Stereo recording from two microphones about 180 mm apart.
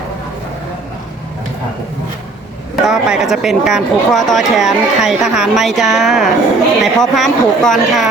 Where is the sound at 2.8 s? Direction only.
5° right (ahead or behind).